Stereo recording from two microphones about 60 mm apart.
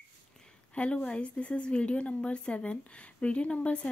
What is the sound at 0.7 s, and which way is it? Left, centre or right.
A woman's voice, left.